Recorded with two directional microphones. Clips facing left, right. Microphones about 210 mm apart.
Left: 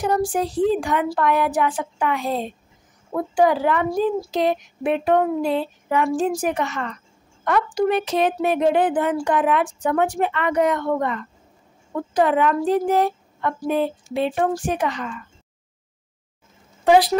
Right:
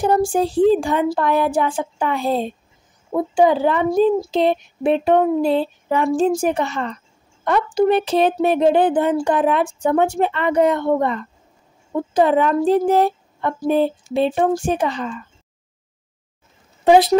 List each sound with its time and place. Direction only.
0.0 s speech: 25° right (ahead or behind)
16.8 s a woman's voice: 25° right (ahead or behind)